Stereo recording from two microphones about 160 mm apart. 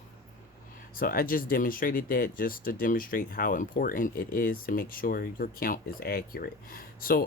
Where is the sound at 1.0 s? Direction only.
65° left (ahead or behind).